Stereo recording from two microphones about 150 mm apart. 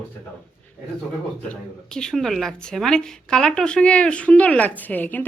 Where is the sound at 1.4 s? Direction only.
5° left (ahead or behind).